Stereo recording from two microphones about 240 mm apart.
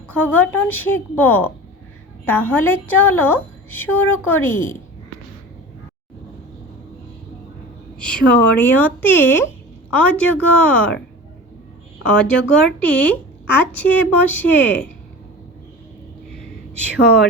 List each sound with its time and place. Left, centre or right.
0.1 s a woman's voice: centre
7.9 s a woman's voice: centre
12.0 s a woman's voice: centre
16.9 s speech: left